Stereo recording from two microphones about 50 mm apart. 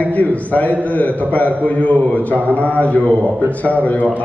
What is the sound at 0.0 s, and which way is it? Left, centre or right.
A man's voice, left.